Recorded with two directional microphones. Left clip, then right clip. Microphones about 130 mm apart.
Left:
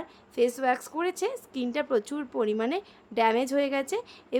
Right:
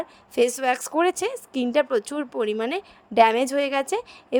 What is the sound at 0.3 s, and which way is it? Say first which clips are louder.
A woman's voice: right 4 dB; 55° right (ahead or behind).